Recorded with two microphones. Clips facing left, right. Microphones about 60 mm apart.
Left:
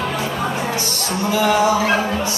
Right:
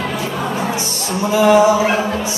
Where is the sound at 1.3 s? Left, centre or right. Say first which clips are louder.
Right 5 dB; right.